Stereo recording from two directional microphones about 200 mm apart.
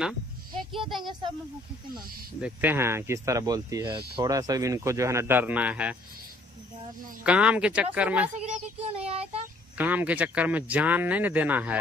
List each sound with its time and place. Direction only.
0.7 s a child's voice: centre (ahead or behind)
2.4 s speech: 10° right (ahead or behind)
7.2 s speech: 5° right (ahead or behind)
8.4 s child singing: 30° right (ahead or behind)
9.8 s speech: 10° right (ahead or behind)